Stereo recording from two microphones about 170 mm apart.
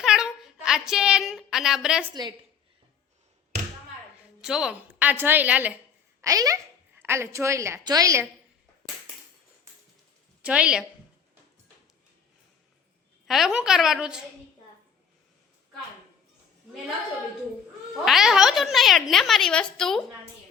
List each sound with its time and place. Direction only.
0.0 s a sound: 5° right (ahead or behind)
4.4 s a woman's voice: 5° right (ahead or behind)
6.2 s a child's voice: 20° right (ahead or behind)
10.4 s speech: 5° right (ahead or behind)
13.2 s speech: centre (ahead or behind)
18.0 s speech: centre (ahead or behind)